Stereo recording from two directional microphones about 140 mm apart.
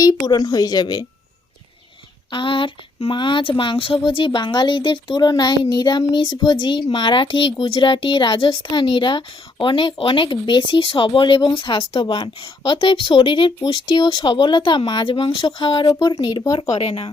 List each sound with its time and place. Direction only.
0.0 s a woman's voice: 30° left (ahead or behind)
2.3 s speech: 35° left (ahead or behind)
16.6 s speech: 45° left (ahead or behind)